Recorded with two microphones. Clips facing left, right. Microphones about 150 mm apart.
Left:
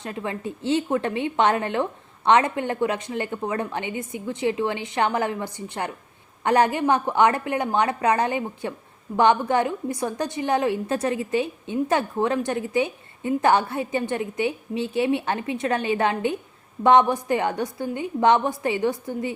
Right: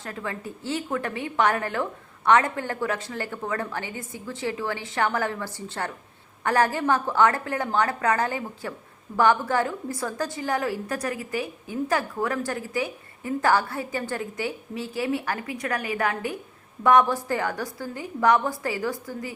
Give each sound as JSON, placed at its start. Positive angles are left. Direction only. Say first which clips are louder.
{"t": 0.0, "sound": "a woman's voice", "louder": "left 4 dB", "side_deg": 20}